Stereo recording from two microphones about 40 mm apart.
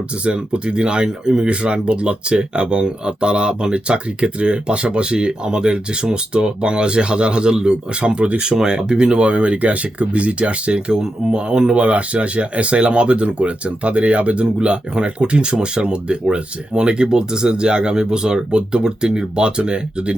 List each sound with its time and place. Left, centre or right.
0.3 s speech: right